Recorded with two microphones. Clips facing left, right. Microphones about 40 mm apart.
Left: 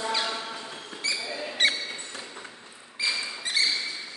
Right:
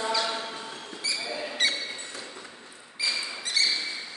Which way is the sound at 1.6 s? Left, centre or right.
Left.